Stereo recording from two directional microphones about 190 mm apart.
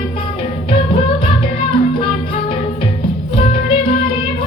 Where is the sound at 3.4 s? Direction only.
30° left (ahead or behind).